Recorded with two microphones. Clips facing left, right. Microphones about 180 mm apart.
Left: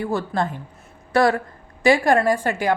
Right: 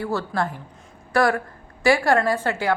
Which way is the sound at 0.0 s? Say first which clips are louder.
Left 2 dB; 15° left (ahead or behind).